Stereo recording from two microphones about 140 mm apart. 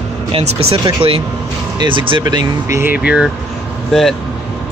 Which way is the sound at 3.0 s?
5° right (ahead or behind).